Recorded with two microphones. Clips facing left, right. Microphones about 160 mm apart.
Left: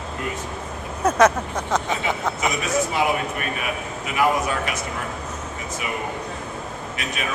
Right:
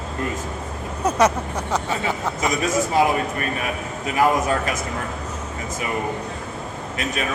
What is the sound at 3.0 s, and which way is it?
Speech, 40° right (ahead or behind).